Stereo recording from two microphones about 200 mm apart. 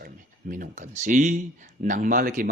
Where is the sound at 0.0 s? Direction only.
45° right (ahead or behind).